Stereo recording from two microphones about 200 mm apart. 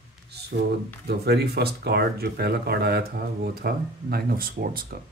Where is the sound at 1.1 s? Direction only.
55° right (ahead or behind).